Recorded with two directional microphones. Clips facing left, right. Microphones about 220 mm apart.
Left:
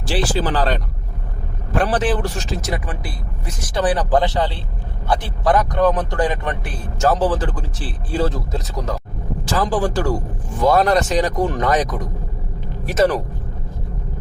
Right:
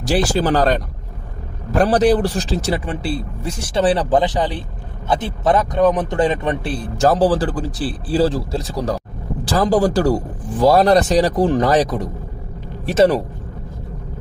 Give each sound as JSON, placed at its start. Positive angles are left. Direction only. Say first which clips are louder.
{"t": 0.0, "sound": "speech", "louder": "right 3 dB", "side_deg": -40}
{"t": 7.0, "sound": "speech", "louder": "right 3 dB", "side_deg": -35}